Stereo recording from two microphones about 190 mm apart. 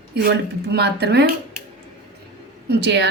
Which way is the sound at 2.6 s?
65° right (ahead or behind).